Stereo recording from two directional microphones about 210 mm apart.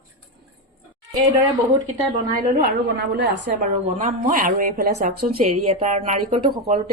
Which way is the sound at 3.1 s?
50° right (ahead or behind).